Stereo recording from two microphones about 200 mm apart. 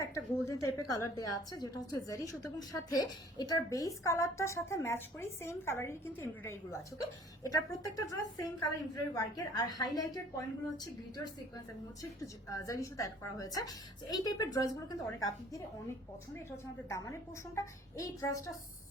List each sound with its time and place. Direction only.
0.0 s a woman's voice: 15° left (ahead or behind)
16.9 s a woman's voice: 15° left (ahead or behind)